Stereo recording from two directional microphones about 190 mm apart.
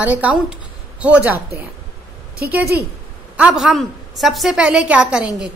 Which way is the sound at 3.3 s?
5° right (ahead or behind).